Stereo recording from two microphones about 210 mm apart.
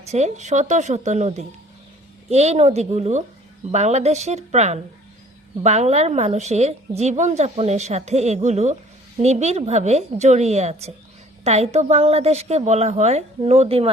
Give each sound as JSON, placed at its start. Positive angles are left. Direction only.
{"t": 0.0, "sound": "speech", "side_deg": -30}